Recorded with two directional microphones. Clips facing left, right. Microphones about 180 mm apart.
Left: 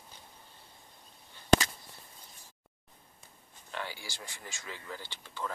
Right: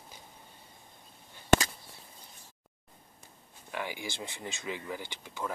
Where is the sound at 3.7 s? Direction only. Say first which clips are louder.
Right 4 dB; 15° right (ahead or behind).